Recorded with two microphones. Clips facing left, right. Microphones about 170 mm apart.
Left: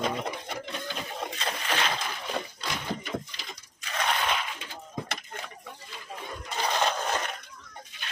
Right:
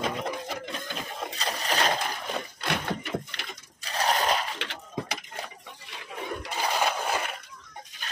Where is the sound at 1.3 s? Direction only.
35° right (ahead or behind).